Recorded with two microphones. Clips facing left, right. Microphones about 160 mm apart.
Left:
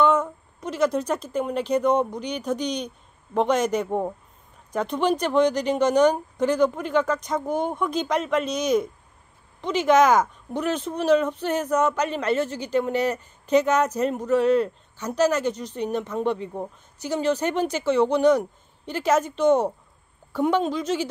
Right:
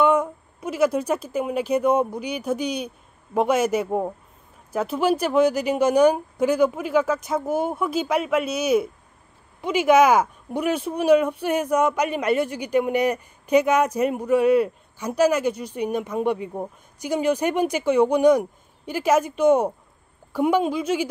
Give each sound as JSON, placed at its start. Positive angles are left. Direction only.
{"t": 0.0, "sound": "a woman's voice", "side_deg": -10}